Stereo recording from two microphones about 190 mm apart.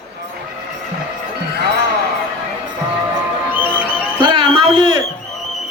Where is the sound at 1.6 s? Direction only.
55° right (ahead or behind).